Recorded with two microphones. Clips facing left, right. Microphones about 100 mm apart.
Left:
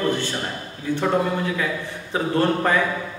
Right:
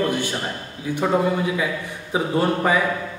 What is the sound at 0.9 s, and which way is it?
Speech, 15° right (ahead or behind).